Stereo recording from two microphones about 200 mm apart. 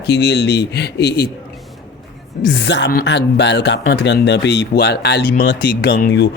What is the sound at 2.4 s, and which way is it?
Speech, 60° left (ahead or behind).